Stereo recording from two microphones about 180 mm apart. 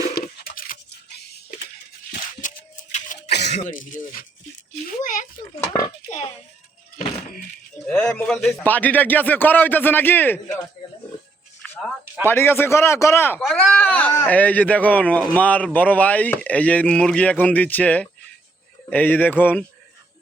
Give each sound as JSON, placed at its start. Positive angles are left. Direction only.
{"t": 0.1, "sound": "toothbrush", "side_deg": 55}
{"t": 2.4, "sound": "a sound", "side_deg": 45}
{"t": 3.2, "sound": "throat clearing", "side_deg": 70}
{"t": 3.5, "sound": "a child's voice", "side_deg": 45}
{"t": 7.9, "sound": "speech", "side_deg": 10}
{"t": 12.2, "sound": "speech", "side_deg": 10}